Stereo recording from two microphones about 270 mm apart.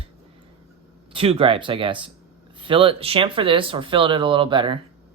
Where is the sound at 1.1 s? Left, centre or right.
Right.